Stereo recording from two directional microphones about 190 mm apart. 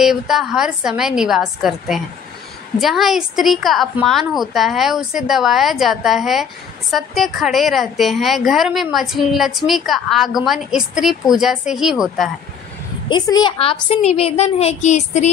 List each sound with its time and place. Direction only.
0.0 s a woman's voice: centre (ahead or behind)
13.1 s a woman's voice: 25° left (ahead or behind)